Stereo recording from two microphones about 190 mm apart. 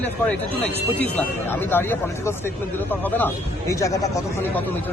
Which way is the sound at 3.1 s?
15° left (ahead or behind).